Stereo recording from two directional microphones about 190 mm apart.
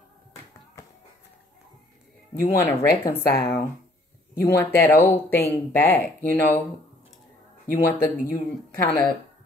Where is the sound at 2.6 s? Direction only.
10° left (ahead or behind).